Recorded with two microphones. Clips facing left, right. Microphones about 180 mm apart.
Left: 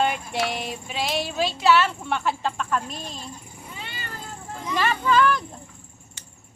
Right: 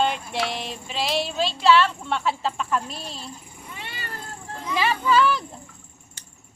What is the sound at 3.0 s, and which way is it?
Speech, 45° left (ahead or behind).